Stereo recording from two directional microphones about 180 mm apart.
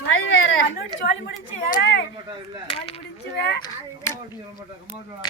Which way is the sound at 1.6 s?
65° left (ahead or behind).